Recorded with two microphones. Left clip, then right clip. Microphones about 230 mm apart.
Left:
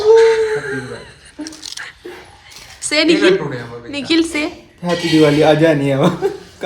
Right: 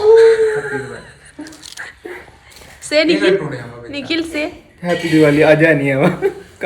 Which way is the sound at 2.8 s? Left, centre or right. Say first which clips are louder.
Left 1 dB; centre.